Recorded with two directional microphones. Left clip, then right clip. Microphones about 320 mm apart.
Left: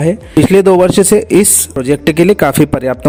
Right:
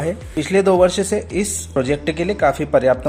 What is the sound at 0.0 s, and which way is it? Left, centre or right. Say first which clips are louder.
A man's voice: left 11 dB; left.